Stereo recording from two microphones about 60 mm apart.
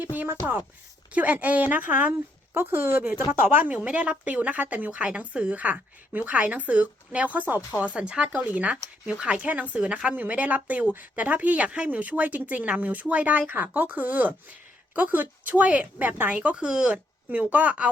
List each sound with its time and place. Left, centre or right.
0.0 s a woman's voice: right
2.6 s a woman's voice: right
16.3 s speech: right
17.2 s a woman's voice: right